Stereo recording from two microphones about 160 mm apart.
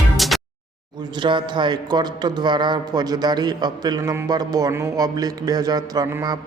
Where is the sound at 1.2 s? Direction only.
30° right (ahead or behind).